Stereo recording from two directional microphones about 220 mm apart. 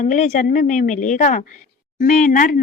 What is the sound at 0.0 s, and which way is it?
Speech, 35° left (ahead or behind).